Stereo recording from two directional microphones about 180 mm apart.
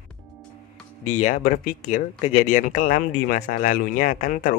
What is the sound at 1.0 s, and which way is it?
Speech, 40° left (ahead or behind).